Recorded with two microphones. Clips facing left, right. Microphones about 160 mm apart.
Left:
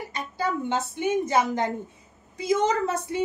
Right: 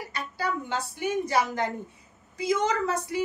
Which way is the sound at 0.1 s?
20° left (ahead or behind).